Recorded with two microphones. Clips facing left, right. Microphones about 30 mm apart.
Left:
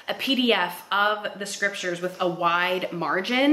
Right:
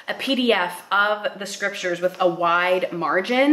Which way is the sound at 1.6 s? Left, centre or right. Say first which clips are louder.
Right 3 dB; centre.